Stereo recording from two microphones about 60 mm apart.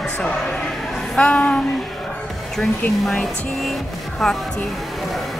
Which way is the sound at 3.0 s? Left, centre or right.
Centre.